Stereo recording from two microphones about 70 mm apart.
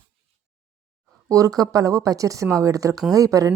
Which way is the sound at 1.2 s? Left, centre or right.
Right.